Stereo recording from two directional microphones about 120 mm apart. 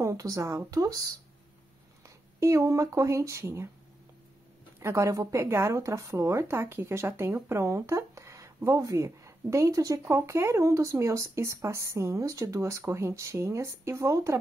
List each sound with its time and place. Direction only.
0.0 s speech: 25° right (ahead or behind)
4.7 s speech: 25° right (ahead or behind)